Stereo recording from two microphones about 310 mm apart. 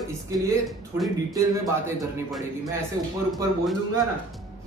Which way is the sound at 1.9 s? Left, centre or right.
Centre.